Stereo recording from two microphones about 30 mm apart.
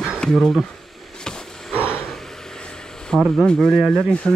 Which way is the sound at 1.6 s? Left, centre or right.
Centre.